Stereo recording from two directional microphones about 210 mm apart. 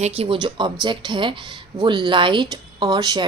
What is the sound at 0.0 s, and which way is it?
A woman's voice, 25° right (ahead or behind).